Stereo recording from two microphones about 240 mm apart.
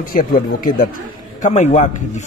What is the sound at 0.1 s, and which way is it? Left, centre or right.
A man's voice, left.